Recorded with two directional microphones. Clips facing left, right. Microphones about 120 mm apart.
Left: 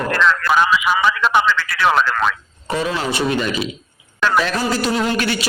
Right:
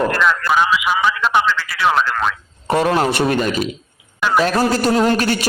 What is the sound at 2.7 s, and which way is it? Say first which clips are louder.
A man's voice: right 5 dB; 55° right (ahead or behind).